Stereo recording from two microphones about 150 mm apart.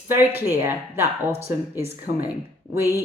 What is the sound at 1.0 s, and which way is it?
Speech, 45° right (ahead or behind).